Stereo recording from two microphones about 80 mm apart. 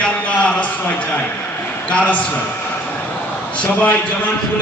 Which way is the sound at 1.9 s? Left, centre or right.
Centre.